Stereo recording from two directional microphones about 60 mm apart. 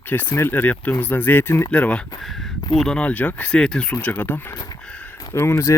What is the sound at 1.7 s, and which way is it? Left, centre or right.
Speech, centre.